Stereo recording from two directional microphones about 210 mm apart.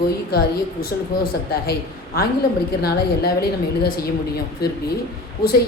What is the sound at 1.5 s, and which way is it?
A woman's voice, 45° left (ahead or behind).